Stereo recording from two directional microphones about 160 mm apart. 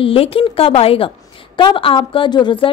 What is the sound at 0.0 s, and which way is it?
A woman's voice, 35° left (ahead or behind).